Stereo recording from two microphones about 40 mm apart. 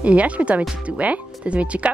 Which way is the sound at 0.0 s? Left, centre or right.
Right.